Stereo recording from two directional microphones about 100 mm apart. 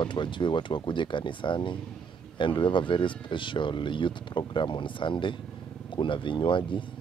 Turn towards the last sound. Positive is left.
turn(degrees=55)  # may be behind; listen again after turning